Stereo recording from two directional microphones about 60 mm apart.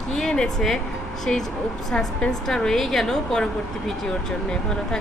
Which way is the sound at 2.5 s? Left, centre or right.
Centre.